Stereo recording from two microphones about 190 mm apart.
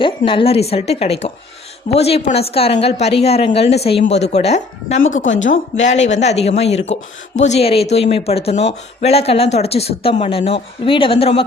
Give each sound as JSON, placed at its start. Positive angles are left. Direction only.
{"t": 0.0, "sound": "speech", "side_deg": 25}